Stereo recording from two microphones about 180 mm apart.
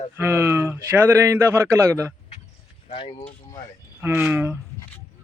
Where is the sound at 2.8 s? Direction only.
30° left (ahead or behind).